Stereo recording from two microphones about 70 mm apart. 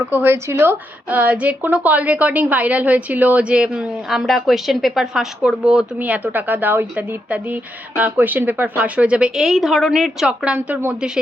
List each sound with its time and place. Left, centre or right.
0.0 s a woman's voice: right; by 5.8 s centre
6.0 s a woman's voice: right
9.3 s a woman's voice: centre